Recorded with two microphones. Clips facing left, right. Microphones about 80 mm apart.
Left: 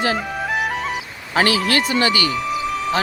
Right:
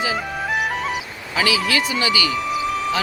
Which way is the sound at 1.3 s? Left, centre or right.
Left.